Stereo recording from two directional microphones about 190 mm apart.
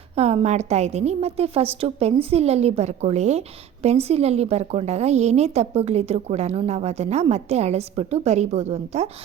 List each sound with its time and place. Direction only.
0.2 s a woman's voice: 35° right (ahead or behind)